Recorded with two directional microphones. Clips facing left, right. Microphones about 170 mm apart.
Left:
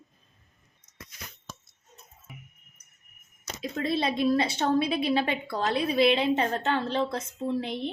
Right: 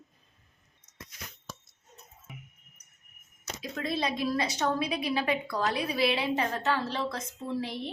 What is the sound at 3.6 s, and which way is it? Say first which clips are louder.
A woman's voice: left 4 dB; 25° left (ahead or behind).